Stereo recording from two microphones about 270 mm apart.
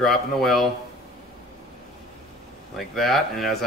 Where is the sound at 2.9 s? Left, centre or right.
Centre.